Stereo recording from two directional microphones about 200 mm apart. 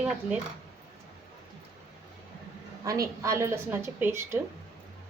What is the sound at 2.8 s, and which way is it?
A woman's voice, 15° right (ahead or behind).